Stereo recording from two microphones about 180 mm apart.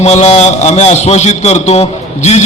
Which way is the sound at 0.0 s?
35° left (ahead or behind).